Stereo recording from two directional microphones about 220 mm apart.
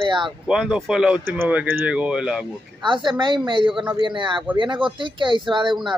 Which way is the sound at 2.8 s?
20° right (ahead or behind).